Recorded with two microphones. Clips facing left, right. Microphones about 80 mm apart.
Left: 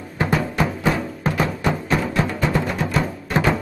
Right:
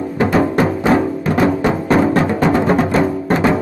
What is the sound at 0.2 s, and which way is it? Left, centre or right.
Music, right.